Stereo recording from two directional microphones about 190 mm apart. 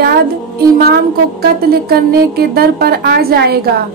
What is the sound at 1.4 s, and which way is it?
Speech, 55° right (ahead or behind).